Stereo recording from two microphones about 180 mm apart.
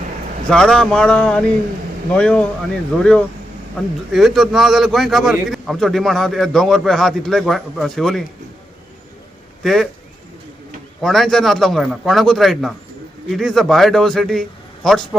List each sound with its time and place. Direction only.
0.5 s a man's voice: 5° left (ahead or behind)
9.6 s a man's voice: centre (ahead or behind)
11.0 s a man's voice: centre (ahead or behind)